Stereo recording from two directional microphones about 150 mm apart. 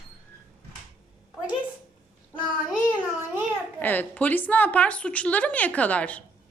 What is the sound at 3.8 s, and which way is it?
A woman's voice, 10° left (ahead or behind).